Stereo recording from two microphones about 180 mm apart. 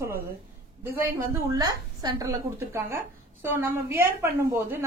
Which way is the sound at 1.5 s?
20° right (ahead or behind).